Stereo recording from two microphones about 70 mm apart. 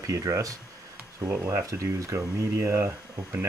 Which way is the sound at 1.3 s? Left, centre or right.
Right.